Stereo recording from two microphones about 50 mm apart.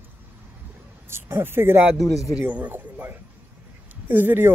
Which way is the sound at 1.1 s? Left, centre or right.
Right.